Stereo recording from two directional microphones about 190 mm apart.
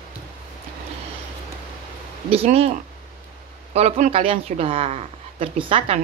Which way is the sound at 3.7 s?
35° right (ahead or behind).